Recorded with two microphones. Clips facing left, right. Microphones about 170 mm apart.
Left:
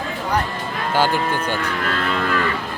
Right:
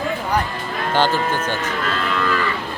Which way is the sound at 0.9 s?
10° left (ahead or behind).